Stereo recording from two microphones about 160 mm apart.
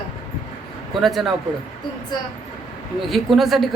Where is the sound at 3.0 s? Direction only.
Centre (ahead or behind).